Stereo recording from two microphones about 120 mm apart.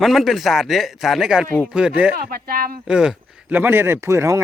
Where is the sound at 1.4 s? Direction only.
15° left (ahead or behind).